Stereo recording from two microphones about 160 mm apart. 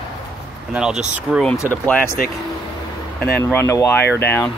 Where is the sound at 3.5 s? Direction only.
15° left (ahead or behind).